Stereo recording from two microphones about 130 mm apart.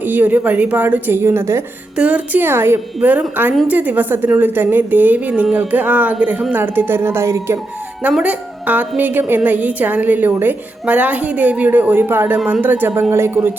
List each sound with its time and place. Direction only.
0.0 s a woman's voice: 15° right (ahead or behind)
8.1 s a woman's voice: 10° right (ahead or behind)